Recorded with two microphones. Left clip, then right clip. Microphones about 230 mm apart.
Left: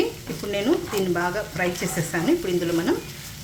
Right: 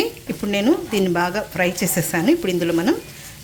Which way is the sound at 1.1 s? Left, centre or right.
Right.